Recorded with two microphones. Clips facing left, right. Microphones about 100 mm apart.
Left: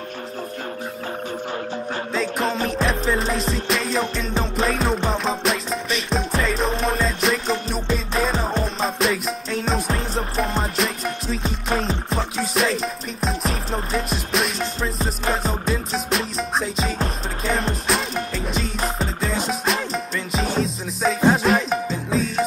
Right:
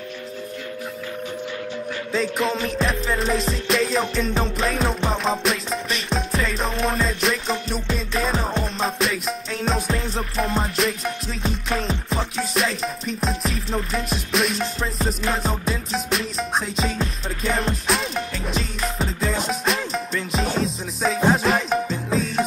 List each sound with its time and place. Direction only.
2.8 s music: centre (ahead or behind)
13.5 s music: 35° left (ahead or behind)
13.9 s music: centre (ahead or behind)